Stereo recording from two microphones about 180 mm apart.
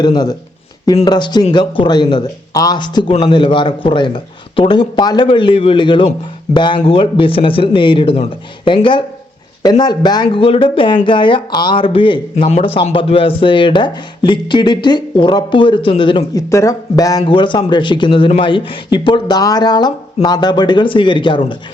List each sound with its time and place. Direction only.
0.0 s speech: 25° left (ahead or behind)